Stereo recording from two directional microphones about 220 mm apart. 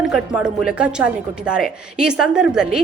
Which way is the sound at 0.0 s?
5° right (ahead or behind).